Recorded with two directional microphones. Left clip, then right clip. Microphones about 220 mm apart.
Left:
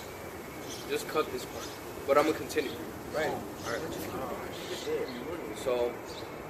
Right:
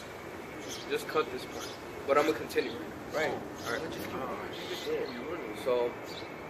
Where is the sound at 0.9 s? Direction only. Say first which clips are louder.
Even; 10° left (ahead or behind).